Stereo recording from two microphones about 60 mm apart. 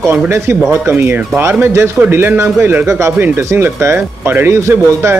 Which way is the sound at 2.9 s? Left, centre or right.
Right.